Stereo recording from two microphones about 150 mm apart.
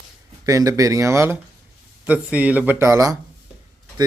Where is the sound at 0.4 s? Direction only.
20° right (ahead or behind).